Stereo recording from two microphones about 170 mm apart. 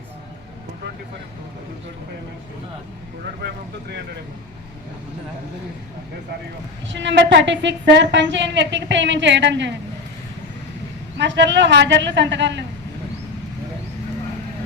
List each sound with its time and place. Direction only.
6.8 s a woman's voice: 90° right
11.2 s a woman's voice: 90° right